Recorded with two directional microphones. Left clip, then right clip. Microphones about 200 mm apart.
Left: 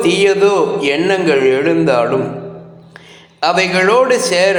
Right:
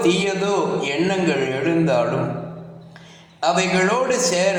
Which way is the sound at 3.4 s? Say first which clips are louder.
Left 6 dB; 25° left (ahead or behind).